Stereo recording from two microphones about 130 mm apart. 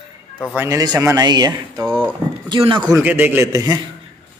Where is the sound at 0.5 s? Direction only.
25° right (ahead or behind); by 2.8 s 40° right (ahead or behind).